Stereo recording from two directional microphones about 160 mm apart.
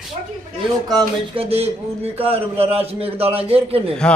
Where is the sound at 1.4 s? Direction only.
40° right (ahead or behind).